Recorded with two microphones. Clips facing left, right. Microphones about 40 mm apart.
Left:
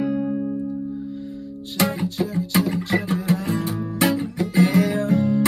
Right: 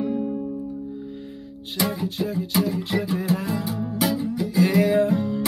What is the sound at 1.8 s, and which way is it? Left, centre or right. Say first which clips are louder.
Music: left 3 dB; left.